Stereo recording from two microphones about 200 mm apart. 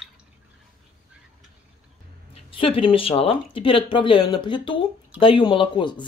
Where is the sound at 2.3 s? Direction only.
25° left (ahead or behind).